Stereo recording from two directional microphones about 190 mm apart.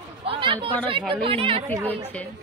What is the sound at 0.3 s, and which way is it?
Chatter, 30° right (ahead or behind).